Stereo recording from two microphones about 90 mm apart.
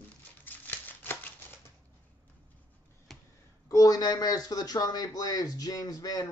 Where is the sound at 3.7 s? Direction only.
40° left (ahead or behind).